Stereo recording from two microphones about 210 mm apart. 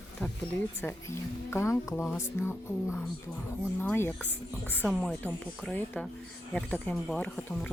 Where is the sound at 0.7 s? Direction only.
10° left (ahead or behind).